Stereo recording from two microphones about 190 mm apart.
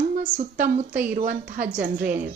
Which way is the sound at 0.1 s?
45° right (ahead or behind).